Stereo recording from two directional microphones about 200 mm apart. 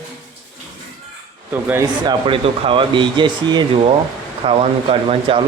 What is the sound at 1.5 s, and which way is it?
Speech, 10° right (ahead or behind).